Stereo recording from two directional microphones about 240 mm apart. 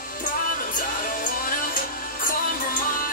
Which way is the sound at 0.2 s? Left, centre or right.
Left.